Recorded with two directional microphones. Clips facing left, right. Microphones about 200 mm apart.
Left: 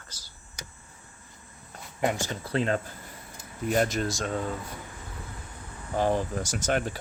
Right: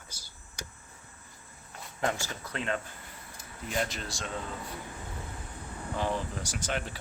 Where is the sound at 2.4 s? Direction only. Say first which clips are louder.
Left 7 dB; 35° left (ahead or behind).